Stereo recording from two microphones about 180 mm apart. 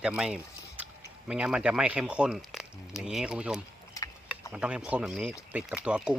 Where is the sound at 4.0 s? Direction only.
20° left (ahead or behind).